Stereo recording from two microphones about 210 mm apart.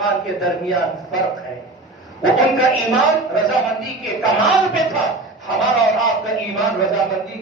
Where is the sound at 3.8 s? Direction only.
Centre (ahead or behind).